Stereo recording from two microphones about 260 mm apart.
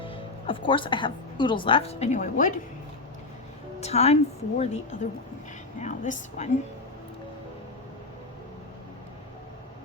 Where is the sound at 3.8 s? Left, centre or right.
Left.